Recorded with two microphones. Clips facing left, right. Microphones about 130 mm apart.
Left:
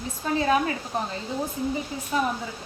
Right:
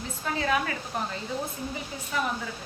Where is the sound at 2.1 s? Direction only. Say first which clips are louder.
Left 4 dB; 35° left (ahead or behind).